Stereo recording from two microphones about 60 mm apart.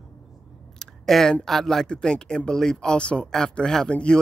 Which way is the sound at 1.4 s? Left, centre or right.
Centre.